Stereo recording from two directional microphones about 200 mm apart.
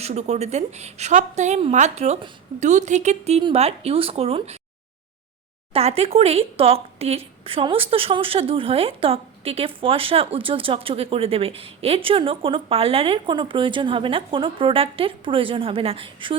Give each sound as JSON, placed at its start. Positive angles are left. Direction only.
{"t": 0.0, "sound": "a woman's voice", "side_deg": -35}
{"t": 5.7, "sound": "speech", "side_deg": -30}